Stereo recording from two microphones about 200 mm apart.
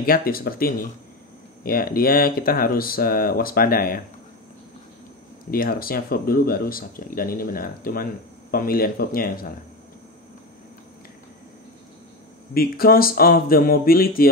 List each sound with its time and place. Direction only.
0.0 s speech: 45° left (ahead or behind)
5.5 s speech: 45° left (ahead or behind)
12.5 s speech: 45° left (ahead or behind)